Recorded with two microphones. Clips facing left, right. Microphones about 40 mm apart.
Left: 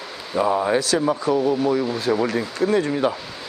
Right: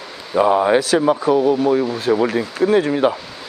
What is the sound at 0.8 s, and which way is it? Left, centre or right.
Speech, centre.